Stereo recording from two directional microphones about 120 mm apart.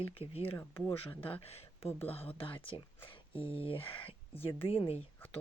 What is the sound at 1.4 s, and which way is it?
Speech, 60° left (ahead or behind).